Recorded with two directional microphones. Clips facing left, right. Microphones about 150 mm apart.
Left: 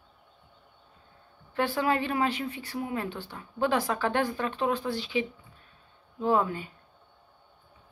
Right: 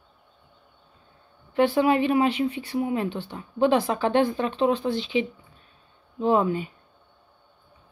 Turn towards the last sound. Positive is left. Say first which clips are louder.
# right 4 dB
turn(degrees=-20)  # may be behind; listen again after turning